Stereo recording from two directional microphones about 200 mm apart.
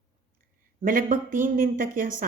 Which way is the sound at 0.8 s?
45° right (ahead or behind).